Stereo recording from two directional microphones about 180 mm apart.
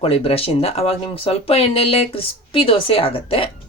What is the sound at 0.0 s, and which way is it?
A woman's voice, 35° left (ahead or behind).